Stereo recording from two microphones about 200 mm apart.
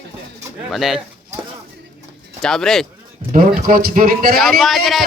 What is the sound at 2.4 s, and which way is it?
Speech, centre (ahead or behind).